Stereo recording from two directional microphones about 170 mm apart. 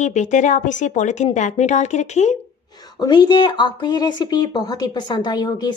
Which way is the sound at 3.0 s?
25° left (ahead or behind).